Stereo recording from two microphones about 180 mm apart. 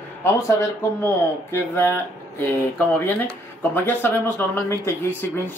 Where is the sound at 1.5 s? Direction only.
10° left (ahead or behind).